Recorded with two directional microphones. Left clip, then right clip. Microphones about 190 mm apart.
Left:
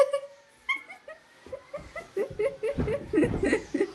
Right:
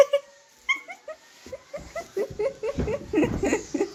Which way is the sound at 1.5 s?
55° right (ahead or behind).